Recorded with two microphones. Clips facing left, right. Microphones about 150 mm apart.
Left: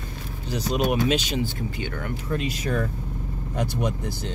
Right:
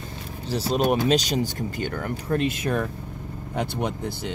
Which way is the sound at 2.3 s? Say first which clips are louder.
Right 4 dB; 50° right (ahead or behind).